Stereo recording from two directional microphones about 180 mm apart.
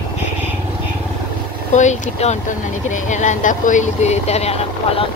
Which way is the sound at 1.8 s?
40° left (ahead or behind).